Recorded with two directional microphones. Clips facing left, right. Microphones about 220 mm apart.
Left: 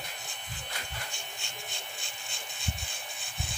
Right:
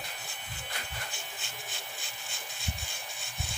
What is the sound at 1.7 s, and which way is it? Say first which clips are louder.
Rub: even; centre (ahead or behind).